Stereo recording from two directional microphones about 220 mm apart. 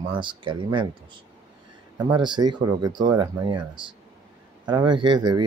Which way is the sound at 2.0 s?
20° right (ahead or behind).